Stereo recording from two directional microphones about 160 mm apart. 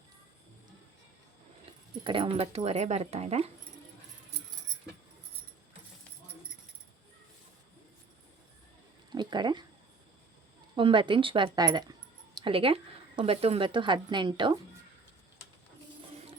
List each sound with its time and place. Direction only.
2.0 s speech: 35° right (ahead or behind)
9.1 s a sound: 25° right (ahead or behind)
10.8 s speech: 30° right (ahead or behind)